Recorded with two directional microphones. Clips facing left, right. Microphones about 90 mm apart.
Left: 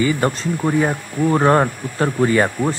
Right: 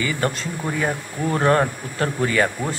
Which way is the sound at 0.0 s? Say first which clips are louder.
Left 5 dB; 30° left (ahead or behind).